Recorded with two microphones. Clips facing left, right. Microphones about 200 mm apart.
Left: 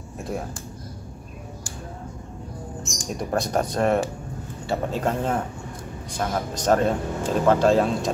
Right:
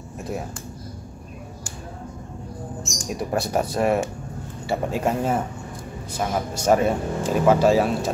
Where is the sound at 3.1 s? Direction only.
5° right (ahead or behind).